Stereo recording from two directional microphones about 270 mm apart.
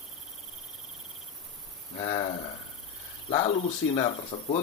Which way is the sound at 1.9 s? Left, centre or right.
Centre.